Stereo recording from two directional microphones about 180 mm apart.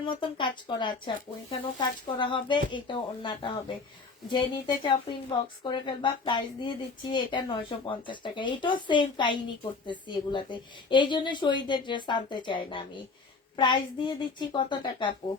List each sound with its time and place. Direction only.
0.1 s speech: 30° left (ahead or behind)